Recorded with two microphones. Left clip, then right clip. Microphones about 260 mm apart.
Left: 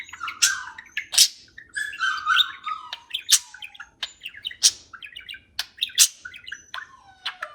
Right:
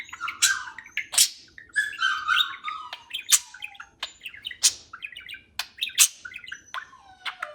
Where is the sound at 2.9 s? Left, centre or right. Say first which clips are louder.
Left 3 dB; centre.